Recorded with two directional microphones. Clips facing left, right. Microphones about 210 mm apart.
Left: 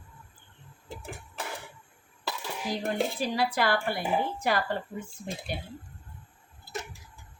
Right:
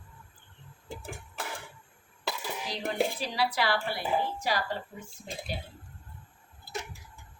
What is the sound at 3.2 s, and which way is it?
Speech, 50° left (ahead or behind).